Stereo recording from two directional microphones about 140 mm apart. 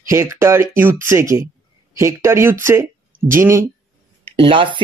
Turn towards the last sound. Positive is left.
turn(degrees=-40)  # may be behind; listen again after turning